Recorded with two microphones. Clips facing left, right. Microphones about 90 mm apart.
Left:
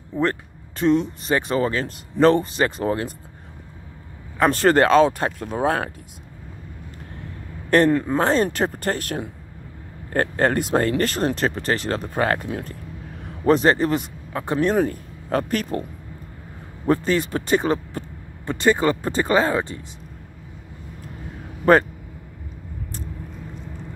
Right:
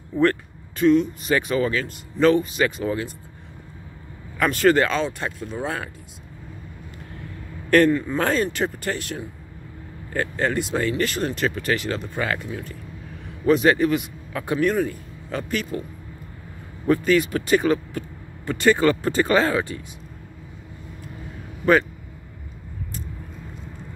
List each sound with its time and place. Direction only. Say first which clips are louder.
0.7 s speech: right 2 dB; 35° left (ahead or behind); by 3.1 s 50° left (ahead or behind)
4.4 s speech: left 2 dB; 35° left (ahead or behind); by 5.9 s 50° left (ahead or behind)
7.9 s speech: left 3 dB; 45° left (ahead or behind)
8.2 s speech: left 3 dB; 30° left (ahead or behind)
8.5 s speech: left 2 dB; 45° left (ahead or behind)
13.5 s speech: even; 35° left (ahead or behind)
14.8 s speech: left 3 dB; 50° left (ahead or behind)
16.8 s speech: right 1 dB; 30° left (ahead or behind)